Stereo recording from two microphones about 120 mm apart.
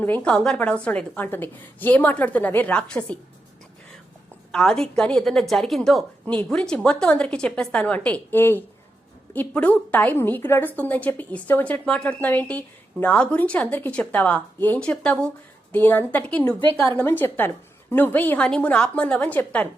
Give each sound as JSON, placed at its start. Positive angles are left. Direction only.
{"t": 0.0, "sound": "a woman's voice", "side_deg": 10}
{"t": 4.5, "sound": "a woman's voice", "side_deg": 5}